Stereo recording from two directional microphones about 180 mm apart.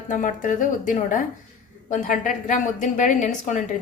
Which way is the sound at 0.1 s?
45° left (ahead or behind).